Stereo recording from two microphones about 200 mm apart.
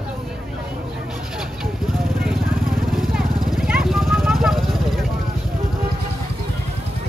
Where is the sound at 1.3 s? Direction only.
Centre (ahead or behind).